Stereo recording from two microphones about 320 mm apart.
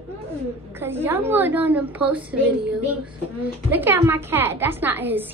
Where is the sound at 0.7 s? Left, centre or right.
Centre.